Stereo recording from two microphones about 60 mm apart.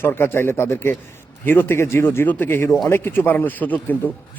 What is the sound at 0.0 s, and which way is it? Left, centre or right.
Speech, left.